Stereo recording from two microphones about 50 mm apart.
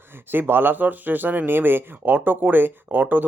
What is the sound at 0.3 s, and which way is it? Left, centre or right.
Speech, right.